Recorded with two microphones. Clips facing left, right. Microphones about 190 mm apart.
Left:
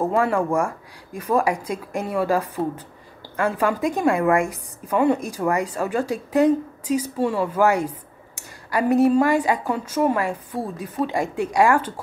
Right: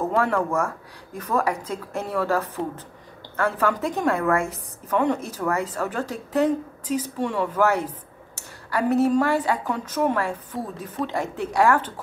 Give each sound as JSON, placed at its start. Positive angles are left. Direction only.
{"t": 0.1, "sound": "a woman's voice", "side_deg": 10}